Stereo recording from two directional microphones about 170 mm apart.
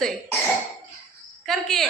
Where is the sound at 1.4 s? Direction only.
Centre (ahead or behind).